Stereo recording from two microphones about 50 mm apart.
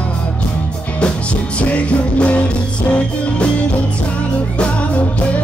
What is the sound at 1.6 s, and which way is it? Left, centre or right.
Music, left.